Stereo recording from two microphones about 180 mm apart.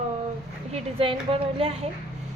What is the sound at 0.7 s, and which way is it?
A woman's voice, 30° right (ahead or behind).